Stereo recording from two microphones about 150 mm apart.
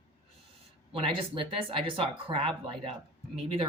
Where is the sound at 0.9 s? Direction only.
35° right (ahead or behind).